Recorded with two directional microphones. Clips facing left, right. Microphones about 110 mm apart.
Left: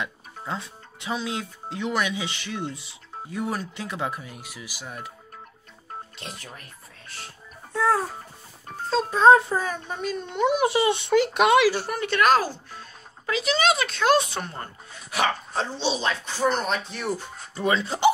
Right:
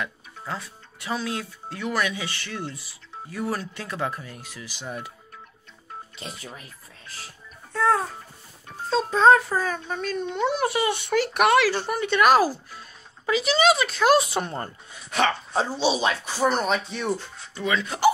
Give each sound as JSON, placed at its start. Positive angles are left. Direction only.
{"t": 0.0, "sound": "speech", "side_deg": 20}
{"t": 4.8, "sound": "speech", "side_deg": 0}
{"t": 6.1, "sound": "speech", "side_deg": 0}
{"t": 7.7, "sound": "speech", "side_deg": 10}
{"t": 9.3, "sound": "speech", "side_deg": 20}
{"t": 10.7, "sound": "speech", "side_deg": 25}
{"t": 11.9, "sound": "speech", "side_deg": 0}
{"t": 15.0, "sound": "speech", "side_deg": 5}
{"t": 15.5, "sound": "speech", "side_deg": -10}
{"t": 17.4, "sound": "speech", "side_deg": 35}